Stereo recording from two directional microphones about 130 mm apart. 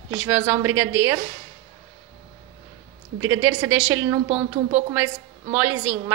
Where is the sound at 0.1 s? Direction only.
15° right (ahead or behind).